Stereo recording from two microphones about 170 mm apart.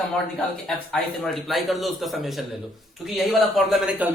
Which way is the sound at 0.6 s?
5° left (ahead or behind).